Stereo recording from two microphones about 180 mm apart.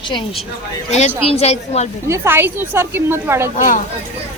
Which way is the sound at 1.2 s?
35° left (ahead or behind).